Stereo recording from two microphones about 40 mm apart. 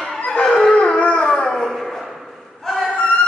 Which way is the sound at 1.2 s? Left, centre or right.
Centre.